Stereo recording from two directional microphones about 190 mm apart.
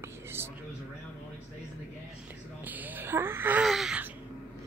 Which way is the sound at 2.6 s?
10° right (ahead or behind).